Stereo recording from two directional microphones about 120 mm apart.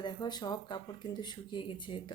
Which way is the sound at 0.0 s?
40° left (ahead or behind).